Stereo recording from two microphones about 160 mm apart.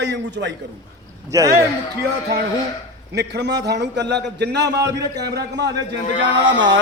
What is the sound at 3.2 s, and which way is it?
A man's voice, 90° right.